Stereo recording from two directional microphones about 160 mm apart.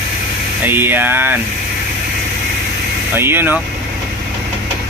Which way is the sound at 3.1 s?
15° right (ahead or behind).